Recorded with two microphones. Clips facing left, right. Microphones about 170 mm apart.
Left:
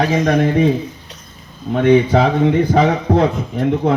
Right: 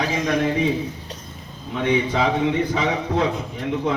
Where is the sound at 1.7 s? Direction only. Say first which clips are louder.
Left 9 dB; 55° left (ahead or behind).